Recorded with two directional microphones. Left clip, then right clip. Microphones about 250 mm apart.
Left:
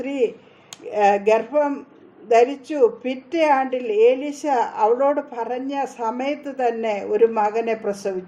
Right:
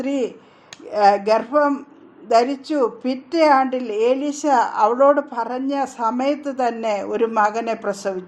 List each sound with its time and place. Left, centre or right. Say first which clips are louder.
0.0 s a woman's voice: left 1 dB; right